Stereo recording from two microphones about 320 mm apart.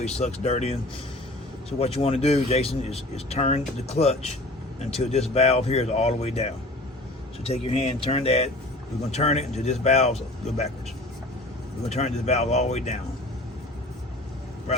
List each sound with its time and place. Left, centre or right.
0.0 s speech: centre
1.8 s speech: centre
7.4 s speech: centre
11.9 s speech: left